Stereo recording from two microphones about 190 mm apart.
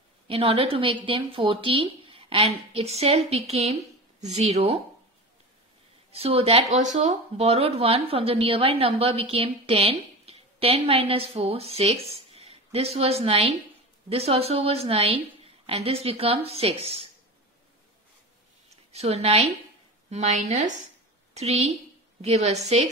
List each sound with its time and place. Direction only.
0.3 s speech: 30° right (ahead or behind)
6.1 s speech: 30° right (ahead or behind)
18.7 s a woman's voice: 35° right (ahead or behind)